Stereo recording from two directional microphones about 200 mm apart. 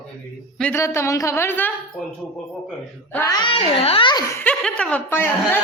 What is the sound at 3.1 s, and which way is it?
Speech, 15° left (ahead or behind).